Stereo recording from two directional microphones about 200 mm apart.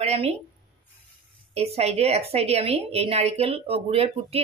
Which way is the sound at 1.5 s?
30° right (ahead or behind).